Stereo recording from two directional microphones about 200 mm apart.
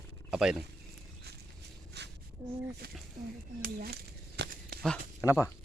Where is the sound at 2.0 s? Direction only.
55° right (ahead or behind).